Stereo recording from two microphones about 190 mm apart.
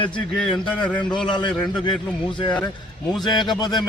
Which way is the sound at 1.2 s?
25° left (ahead or behind).